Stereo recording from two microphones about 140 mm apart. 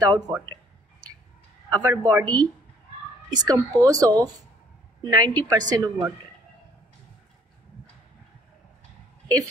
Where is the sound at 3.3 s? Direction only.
25° right (ahead or behind).